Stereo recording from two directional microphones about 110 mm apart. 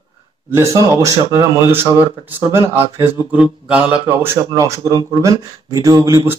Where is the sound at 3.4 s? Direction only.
10° right (ahead or behind).